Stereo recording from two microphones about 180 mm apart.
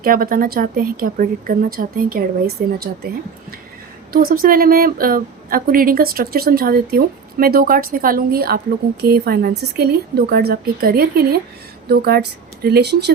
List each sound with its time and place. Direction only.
0.0 s a woman's voice: 50° right (ahead or behind)
4.1 s a woman's voice: 55° right (ahead or behind)